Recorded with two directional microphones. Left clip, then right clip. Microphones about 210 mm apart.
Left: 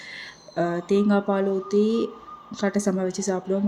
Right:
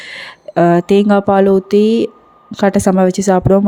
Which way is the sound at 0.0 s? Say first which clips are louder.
Right 10 dB; 40° right (ahead or behind).